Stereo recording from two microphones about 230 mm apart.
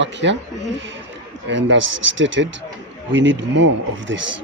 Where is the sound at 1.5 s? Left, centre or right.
Right.